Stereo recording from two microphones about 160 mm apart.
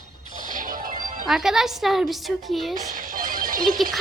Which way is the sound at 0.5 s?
60° right (ahead or behind).